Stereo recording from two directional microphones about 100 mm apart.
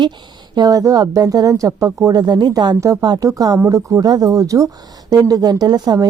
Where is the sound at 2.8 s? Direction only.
30° right (ahead or behind).